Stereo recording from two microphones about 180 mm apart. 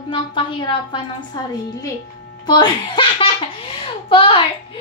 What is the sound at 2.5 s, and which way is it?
Belly laugh, 25° left (ahead or behind).